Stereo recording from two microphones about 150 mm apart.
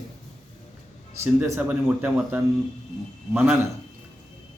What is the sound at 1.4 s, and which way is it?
A man's voice, 15° right (ahead or behind).